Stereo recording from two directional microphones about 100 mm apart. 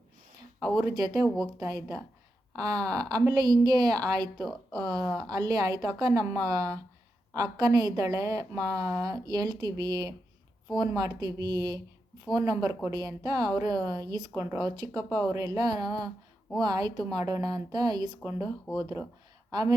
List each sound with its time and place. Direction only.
0.8 s a woman's voice: 40° right (ahead or behind)
18.7 s speech: 5° left (ahead or behind)
19.5 s speech: 45° right (ahead or behind)